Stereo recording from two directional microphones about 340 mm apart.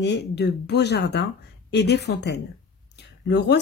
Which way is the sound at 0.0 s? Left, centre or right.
Left.